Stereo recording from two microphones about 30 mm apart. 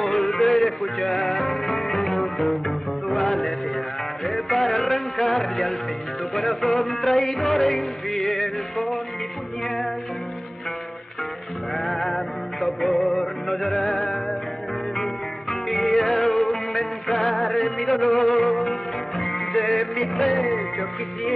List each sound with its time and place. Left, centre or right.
0.0 s music: centre
11.7 s music: centre
15.7 s music: centre